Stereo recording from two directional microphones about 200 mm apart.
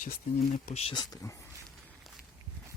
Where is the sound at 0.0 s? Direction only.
40° left (ahead or behind); by 1.5 s 15° left (ahead or behind).